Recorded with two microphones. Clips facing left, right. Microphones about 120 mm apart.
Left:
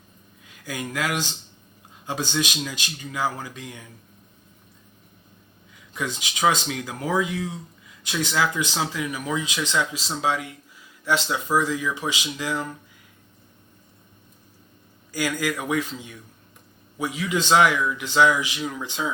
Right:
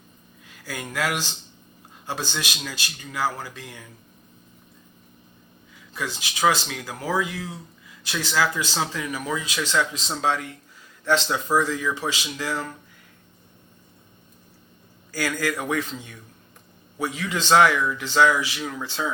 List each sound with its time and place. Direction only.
0.6 s speech: 15° left (ahead or behind)
5.9 s speech: 20° left (ahead or behind)
15.1 s speech: 15° left (ahead or behind)